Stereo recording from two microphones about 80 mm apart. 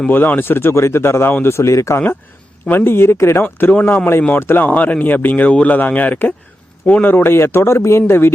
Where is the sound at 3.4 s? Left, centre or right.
Centre.